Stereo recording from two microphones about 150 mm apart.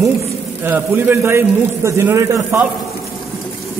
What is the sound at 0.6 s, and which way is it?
A man's voice, 15° right (ahead or behind).